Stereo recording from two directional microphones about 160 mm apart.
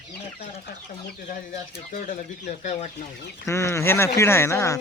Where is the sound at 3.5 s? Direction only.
20° left (ahead or behind).